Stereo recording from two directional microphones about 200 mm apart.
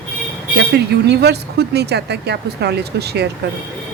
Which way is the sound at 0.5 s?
55° right (ahead or behind).